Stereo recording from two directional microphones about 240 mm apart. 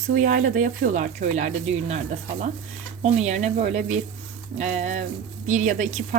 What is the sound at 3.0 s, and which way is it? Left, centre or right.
Speech, right.